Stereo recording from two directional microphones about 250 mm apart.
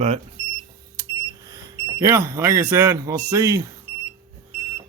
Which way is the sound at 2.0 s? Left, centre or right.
Centre.